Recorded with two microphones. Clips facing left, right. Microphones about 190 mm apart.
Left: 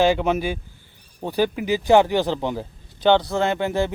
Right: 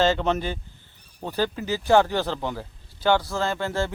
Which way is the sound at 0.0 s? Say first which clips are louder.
Left 3 dB; 10° left (ahead or behind).